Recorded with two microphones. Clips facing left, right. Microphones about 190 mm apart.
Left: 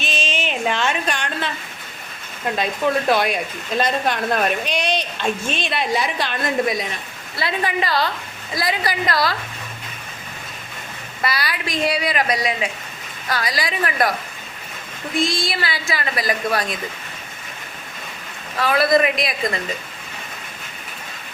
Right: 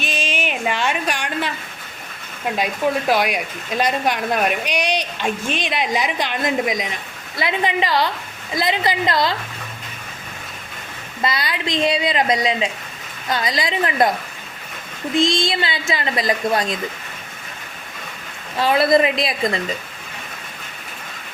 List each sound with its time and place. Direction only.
0.0 s a sound: 10° right (ahead or behind)
3.1 s a woman's voice: 10° right (ahead or behind)
11.2 s a woman's voice: 20° right (ahead or behind)
15.1 s a woman's voice: 25° right (ahead or behind)
18.5 s a woman's voice: 25° right (ahead or behind)